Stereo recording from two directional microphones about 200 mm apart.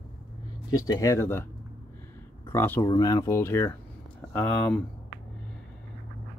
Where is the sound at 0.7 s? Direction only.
20° left (ahead or behind).